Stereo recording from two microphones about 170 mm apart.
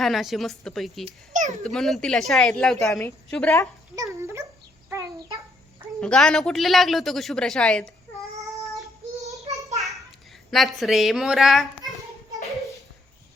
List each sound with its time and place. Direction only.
0.0 s speech: centre (ahead or behind)
1.3 s a sound: 45° right (ahead or behind)
1.6 s speech: centre (ahead or behind)
3.9 s dog: 15° right (ahead or behind)
6.0 s speech: 5° left (ahead or behind)
9.5 s child singing: 40° right (ahead or behind)
10.5 s speech: centre (ahead or behind)